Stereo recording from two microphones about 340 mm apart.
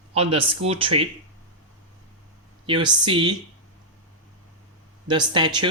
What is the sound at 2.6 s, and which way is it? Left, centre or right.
Speech, centre.